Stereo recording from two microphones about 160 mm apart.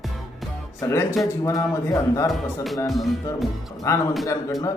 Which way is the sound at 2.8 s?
Centre (ahead or behind).